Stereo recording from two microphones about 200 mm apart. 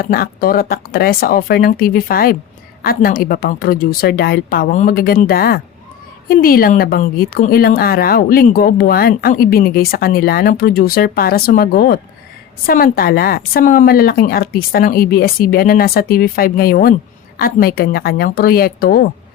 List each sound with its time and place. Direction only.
0.0 s speech: 45° left (ahead or behind)